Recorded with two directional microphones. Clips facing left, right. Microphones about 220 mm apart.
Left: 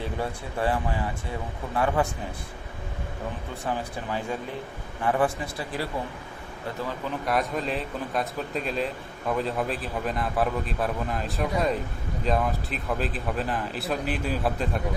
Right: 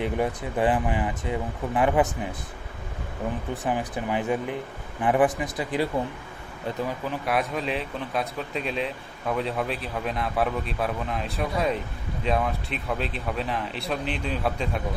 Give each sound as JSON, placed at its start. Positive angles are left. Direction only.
{"t": 0.0, "sound": "speech", "side_deg": -15}
{"t": 3.7, "sound": "speech", "side_deg": -15}
{"t": 7.1, "sound": "speech", "side_deg": 0}